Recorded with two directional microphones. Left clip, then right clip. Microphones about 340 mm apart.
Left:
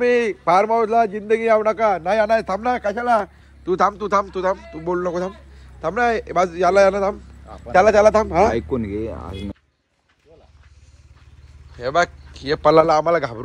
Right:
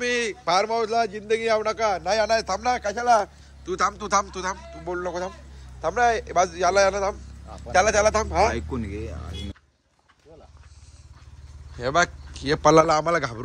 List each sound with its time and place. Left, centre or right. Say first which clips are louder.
0.0 s a man's voice: left 7 dB; centre
3.7 s speech: left 5 dB; centre
4.6 s a man's voice: left 7 dB; centre
8.6 s speech: left 8 dB; centre
11.8 s a man's voice: left 3 dB; centre